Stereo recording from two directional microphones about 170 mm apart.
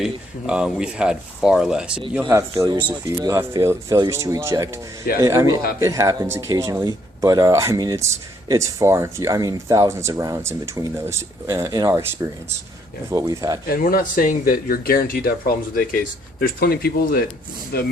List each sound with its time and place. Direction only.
0.0 s speech: 5° right (ahead or behind)
2.3 s speech: 15° right (ahead or behind)
13.1 s speech: 20° right (ahead or behind)
13.7 s speech: 55° left (ahead or behind)